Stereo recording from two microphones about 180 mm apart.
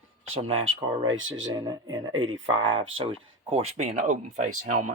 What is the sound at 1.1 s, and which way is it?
Speech, 90° right.